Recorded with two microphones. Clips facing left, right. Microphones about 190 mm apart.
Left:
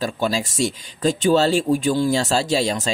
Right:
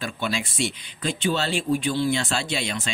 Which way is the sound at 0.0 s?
40° left (ahead or behind).